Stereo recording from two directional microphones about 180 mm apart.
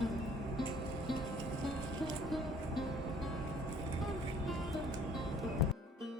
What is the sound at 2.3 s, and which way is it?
Music, centre (ahead or behind).